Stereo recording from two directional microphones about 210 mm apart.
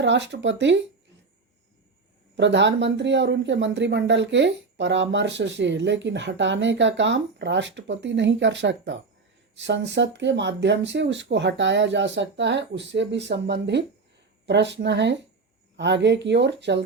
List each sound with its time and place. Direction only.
0.0 s speech: 55° right (ahead or behind)
2.3 s speech: 55° right (ahead or behind)